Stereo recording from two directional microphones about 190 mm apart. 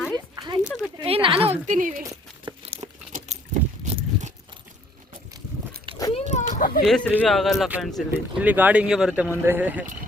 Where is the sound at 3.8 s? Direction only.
35° right (ahead or behind).